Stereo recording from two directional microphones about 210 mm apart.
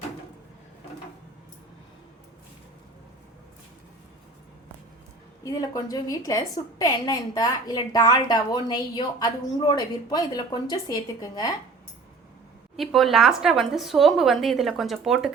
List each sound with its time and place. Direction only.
5.4 s a woman's voice: 15° left (ahead or behind)
12.7 s a woman's voice: centre (ahead or behind)